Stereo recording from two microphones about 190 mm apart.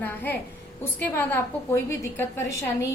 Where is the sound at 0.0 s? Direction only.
10° left (ahead or behind).